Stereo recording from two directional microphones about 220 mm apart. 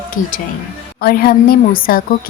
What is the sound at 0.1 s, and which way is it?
A woman's voice, 35° left (ahead or behind).